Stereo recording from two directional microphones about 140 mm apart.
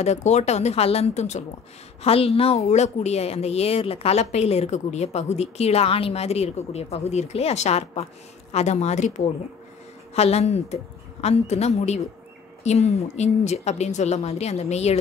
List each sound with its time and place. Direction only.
0.0 s a woman's voice: 55° left (ahead or behind)